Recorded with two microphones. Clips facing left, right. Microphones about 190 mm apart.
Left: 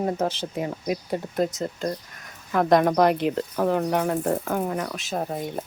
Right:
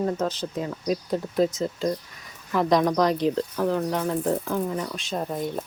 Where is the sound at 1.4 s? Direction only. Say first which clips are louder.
Right 3 dB; 50° left (ahead or behind).